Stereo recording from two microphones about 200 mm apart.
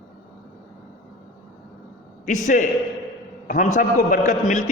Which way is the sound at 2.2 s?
40° left (ahead or behind).